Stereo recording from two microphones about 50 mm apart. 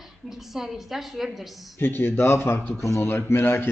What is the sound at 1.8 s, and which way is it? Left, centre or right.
Speech, left.